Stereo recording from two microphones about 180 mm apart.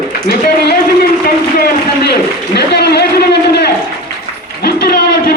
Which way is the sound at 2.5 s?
65° left (ahead or behind).